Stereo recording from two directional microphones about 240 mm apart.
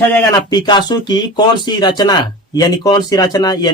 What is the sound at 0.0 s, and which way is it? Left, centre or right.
A man's voice, centre.